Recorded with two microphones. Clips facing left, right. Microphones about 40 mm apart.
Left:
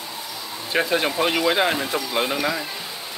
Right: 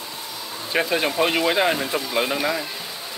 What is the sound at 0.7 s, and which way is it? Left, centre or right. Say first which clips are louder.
Speech: even; centre.